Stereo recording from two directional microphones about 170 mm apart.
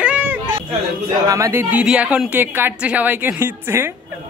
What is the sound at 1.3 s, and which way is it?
A man's voice, 15° right (ahead or behind).